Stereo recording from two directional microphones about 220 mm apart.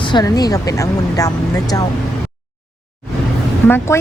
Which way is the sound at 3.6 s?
10° left (ahead or behind).